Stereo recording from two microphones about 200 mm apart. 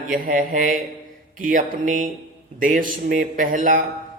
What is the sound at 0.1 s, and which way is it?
Speech, 40° right (ahead or behind).